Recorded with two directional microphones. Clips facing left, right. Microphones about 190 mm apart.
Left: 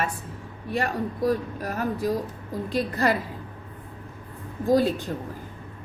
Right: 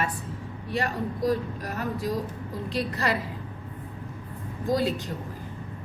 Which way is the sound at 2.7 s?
50° left (ahead or behind).